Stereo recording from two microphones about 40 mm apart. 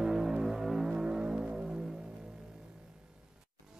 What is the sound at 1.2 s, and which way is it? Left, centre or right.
Vehicle, centre.